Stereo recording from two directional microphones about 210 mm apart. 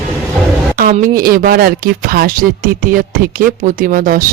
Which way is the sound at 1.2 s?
45° right (ahead or behind).